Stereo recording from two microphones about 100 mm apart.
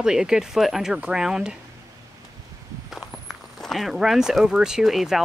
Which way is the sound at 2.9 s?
Centre (ahead or behind).